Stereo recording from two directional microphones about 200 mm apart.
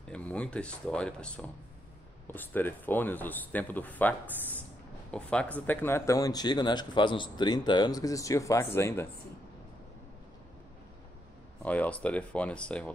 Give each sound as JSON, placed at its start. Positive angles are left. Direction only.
{"t": 0.1, "sound": "speech", "side_deg": 5}
{"t": 5.1, "sound": "speech", "side_deg": 5}
{"t": 11.6, "sound": "speech", "side_deg": 5}